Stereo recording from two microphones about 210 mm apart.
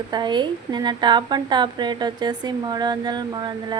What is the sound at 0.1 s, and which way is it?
Speech, 20° right (ahead or behind).